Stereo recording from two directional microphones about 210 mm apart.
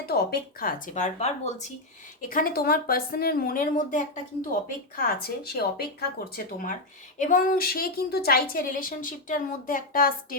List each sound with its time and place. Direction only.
0.0 s a woman's voice: 50° left (ahead or behind)
2.3 s a woman's voice: 45° left (ahead or behind)